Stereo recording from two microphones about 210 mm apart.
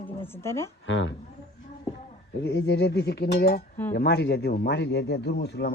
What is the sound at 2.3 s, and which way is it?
A man's voice, 55° left (ahead or behind).